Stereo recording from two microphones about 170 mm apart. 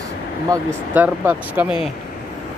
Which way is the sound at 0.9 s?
10° right (ahead or behind).